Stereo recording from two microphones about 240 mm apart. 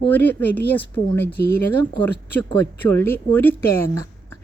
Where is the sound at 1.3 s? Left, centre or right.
Left.